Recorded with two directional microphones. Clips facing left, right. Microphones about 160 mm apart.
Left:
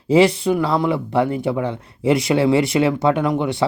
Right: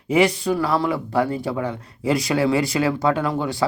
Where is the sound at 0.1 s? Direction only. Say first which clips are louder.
Left 4 dB; 25° left (ahead or behind).